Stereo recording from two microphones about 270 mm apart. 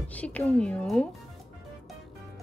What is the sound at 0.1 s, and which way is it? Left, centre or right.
Speech, centre.